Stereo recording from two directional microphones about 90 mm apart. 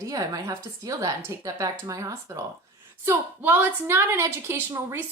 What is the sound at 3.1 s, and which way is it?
A woman's voice, 25° right (ahead or behind).